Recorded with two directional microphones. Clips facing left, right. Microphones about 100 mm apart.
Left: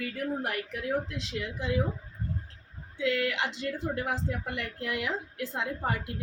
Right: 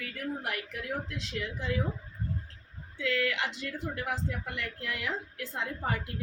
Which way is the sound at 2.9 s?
15° left (ahead or behind).